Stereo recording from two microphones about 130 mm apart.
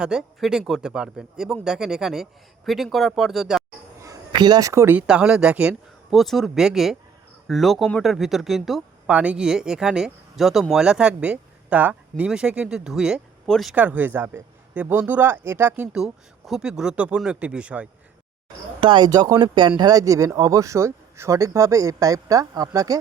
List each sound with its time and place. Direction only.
0.0 s speech: 5° right (ahead or behind)
4.0 s a sound: 30° right (ahead or behind)
4.9 s speech: 10° right (ahead or behind)
13.7 s speech: 10° right (ahead or behind)
18.8 s speech: 35° right (ahead or behind)